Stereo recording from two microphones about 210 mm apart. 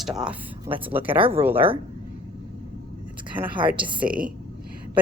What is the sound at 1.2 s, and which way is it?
Speech, 25° right (ahead or behind).